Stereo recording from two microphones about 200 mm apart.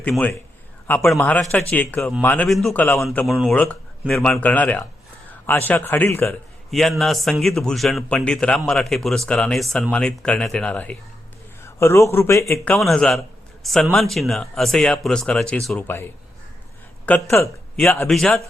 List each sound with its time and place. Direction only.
0.0 s a man's voice: 5° left (ahead or behind)
6.7 s a man's voice: centre (ahead or behind)
17.1 s a man's voice: 15° left (ahead or behind)